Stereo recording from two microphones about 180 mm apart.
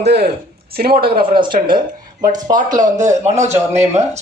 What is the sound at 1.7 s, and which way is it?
Speech, 25° right (ahead or behind).